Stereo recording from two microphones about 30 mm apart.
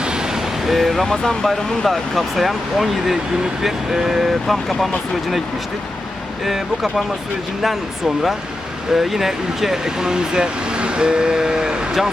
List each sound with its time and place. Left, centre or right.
0.0 s vehicle: right
0.7 s speech: centre
1.0 s speech: centre
1.9 s speech: centre
6.4 s speech: centre; by 11.9 s right